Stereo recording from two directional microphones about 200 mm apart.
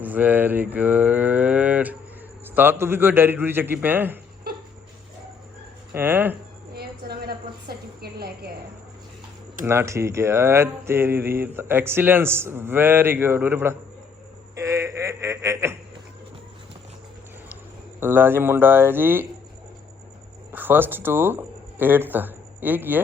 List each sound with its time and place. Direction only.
0.0 s cattle: 10° right (ahead or behind)
2.6 s speech: 10° right (ahead or behind)
5.9 s speech: 10° right (ahead or behind)
6.7 s a sound: 50° right (ahead or behind)
9.6 s speech: 15° right (ahead or behind)
14.5 s a sound: 15° right (ahead or behind)
18.0 s speech: 10° right (ahead or behind)
20.5 s speech: 10° right (ahead or behind)